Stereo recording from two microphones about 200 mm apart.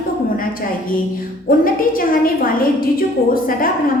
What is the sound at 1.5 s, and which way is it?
Speech, 45° left (ahead or behind).